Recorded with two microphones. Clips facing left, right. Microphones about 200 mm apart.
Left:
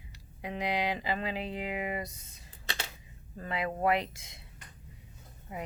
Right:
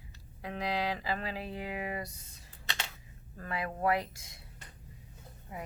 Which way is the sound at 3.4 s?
20° left (ahead or behind).